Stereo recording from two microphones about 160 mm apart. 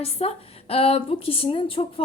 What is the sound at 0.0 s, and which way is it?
Speech, 35° left (ahead or behind).